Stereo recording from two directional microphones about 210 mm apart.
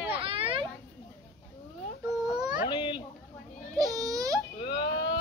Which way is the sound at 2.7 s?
20° left (ahead or behind).